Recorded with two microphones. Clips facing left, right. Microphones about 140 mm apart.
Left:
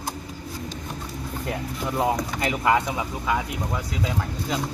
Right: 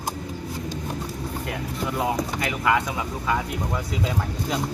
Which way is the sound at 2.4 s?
25° left (ahead or behind).